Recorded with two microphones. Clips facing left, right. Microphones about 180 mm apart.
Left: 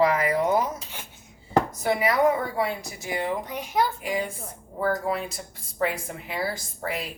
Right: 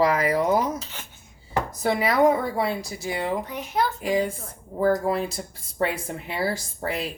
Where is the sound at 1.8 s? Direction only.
30° right (ahead or behind).